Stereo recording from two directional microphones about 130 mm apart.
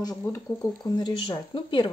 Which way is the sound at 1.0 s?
35° left (ahead or behind).